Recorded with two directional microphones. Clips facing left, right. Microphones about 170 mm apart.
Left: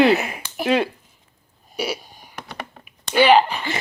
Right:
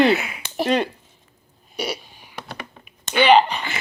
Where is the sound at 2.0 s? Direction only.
45° left (ahead or behind).